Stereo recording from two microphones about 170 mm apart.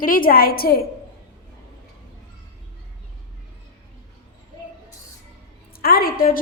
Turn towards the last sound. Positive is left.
turn(degrees=55)  # may be behind; listen again after turning